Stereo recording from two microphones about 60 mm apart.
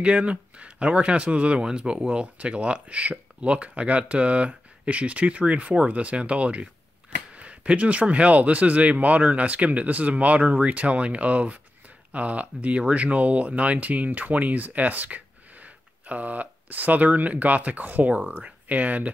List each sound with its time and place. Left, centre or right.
0.0 s speech: centre